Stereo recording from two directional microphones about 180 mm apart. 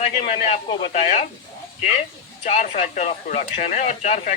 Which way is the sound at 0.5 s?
30° left (ahead or behind).